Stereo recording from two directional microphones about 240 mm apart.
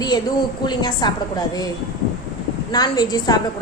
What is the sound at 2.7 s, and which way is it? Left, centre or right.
Speech, centre.